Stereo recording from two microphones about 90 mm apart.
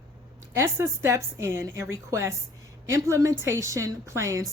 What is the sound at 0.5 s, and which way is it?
A woman's voice, 30° right (ahead or behind).